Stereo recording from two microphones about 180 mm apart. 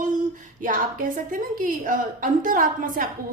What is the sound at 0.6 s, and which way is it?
A woman's voice, 50° right (ahead or behind).